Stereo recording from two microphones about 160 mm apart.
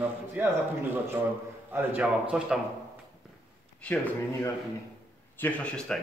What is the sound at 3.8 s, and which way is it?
Speech, 10° left (ahead or behind).